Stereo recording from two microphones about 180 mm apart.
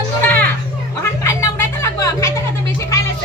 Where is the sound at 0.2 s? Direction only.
10° left (ahead or behind).